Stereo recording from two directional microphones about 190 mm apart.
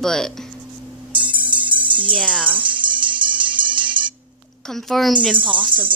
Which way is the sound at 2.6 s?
25° right (ahead or behind).